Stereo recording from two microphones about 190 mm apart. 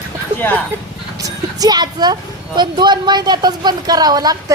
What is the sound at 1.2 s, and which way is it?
Speech, 20° right (ahead or behind).